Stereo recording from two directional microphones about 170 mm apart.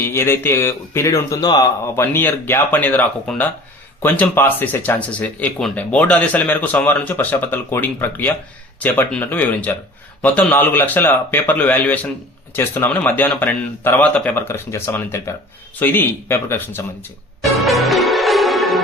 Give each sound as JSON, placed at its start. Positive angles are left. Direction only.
{"t": 0.0, "sound": "speech", "side_deg": 15}
{"t": 2.1, "sound": "speech", "side_deg": 10}
{"t": 17.6, "sound": "music", "side_deg": 0}